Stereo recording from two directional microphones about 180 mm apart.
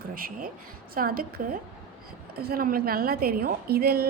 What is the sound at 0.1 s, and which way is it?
Speech, 55° right (ahead or behind).